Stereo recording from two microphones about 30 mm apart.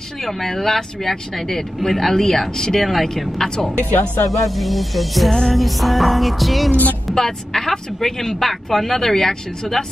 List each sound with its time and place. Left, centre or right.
0.2 s speech: centre
3.7 s speech: left
4.5 s music: centre
7.2 s speech: centre